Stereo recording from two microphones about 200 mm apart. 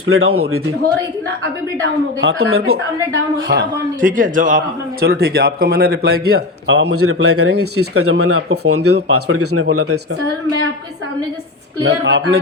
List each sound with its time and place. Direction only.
0.1 s speech: 90° right
2.2 s speech: 90° right
3.5 s a man's voice: 45° right (ahead or behind); by 9.6 s 90° right
11.9 s a man's voice: 55° right (ahead or behind)